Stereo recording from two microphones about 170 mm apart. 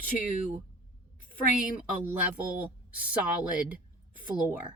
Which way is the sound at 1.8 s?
10° right (ahead or behind).